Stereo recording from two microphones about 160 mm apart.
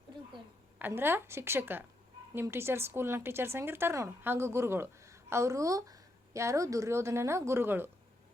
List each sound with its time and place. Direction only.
0.8 s speech: 15° right (ahead or behind)